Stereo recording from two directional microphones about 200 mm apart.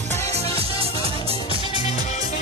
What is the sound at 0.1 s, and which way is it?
Music, 30° right (ahead or behind).